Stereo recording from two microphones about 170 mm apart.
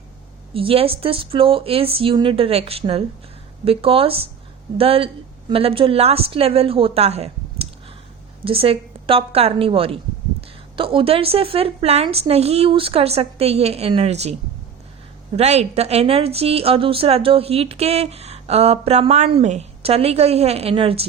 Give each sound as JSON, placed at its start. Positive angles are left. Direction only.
{"t": 0.5, "sound": "a woman's voice", "side_deg": -35}
{"t": 15.4, "sound": "a woman's voice", "side_deg": -40}